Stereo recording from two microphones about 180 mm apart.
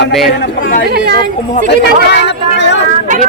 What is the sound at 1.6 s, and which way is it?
Speech, 65° left (ahead or behind).